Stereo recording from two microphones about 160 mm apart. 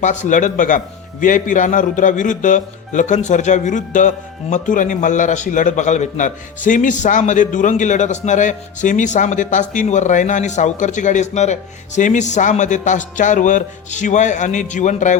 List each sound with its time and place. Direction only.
0.0 s a man's voice: 50° left (ahead or behind)